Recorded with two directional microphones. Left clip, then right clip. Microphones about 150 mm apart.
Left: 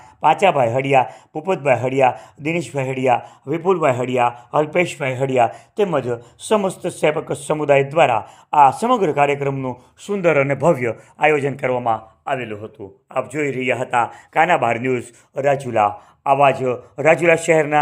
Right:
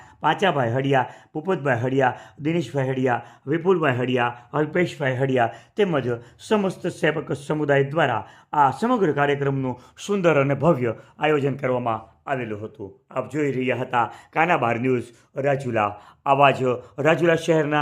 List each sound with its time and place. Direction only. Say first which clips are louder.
0.2 s a man's voice: left 6 dB; 5° left (ahead or behind)
4.6 s a man's voice: left 1 dB; 15° left (ahead or behind)
16.2 s a man's voice: left 3 dB; centre (ahead or behind)
17.1 s speech: left 5 dB; 15° left (ahead or behind)